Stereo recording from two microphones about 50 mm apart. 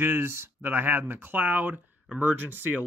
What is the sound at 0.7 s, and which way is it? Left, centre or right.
Speech, right.